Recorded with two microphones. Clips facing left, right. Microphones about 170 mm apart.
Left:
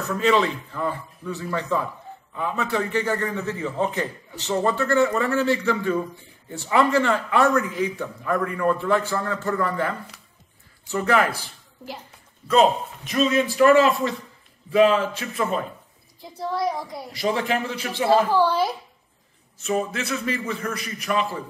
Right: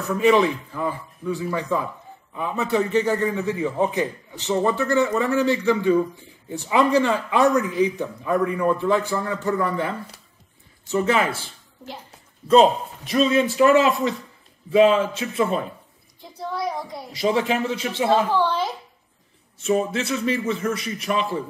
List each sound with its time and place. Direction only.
0.1 s a man's voice: 15° right (ahead or behind)
12.4 s a man's voice: 30° right (ahead or behind)
14.8 s a man's voice: 25° right (ahead or behind)
16.3 s speech: centre (ahead or behind)
17.2 s a man's voice: 25° right (ahead or behind)
18.4 s a child's voice: 10° left (ahead or behind)
19.6 s a man's voice: 25° right (ahead or behind)